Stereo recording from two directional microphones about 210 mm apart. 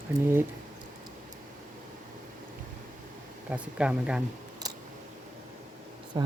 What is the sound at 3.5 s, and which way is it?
Speech, 5° right (ahead or behind).